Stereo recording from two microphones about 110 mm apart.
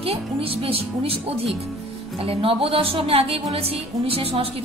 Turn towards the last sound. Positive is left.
turn(degrees=-60)  # may be behind; listen again after turning